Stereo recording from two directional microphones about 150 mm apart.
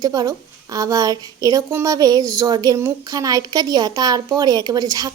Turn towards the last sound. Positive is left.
turn(degrees=-25)  # may be behind; listen again after turning